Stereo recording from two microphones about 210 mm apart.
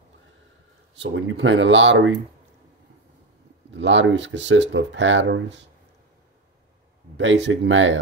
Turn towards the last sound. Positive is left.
turn(degrees=-60)  # may be behind; listen again after turning